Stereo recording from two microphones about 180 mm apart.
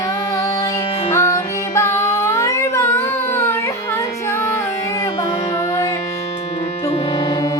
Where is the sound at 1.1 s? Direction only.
15° left (ahead or behind).